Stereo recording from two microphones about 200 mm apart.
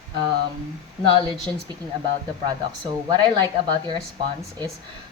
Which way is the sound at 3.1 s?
20° right (ahead or behind).